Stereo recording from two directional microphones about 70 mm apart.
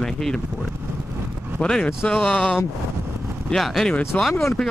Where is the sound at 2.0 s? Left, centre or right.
Left.